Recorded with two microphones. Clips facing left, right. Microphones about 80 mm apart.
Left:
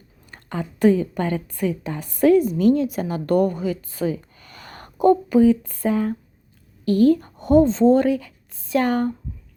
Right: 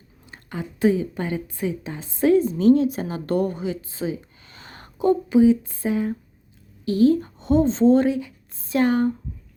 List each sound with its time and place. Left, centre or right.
0.4 s a woman's voice: centre
6.8 s a woman's voice: centre
7.3 s speech: left
7.6 s speech: right
7.9 s a woman's voice: right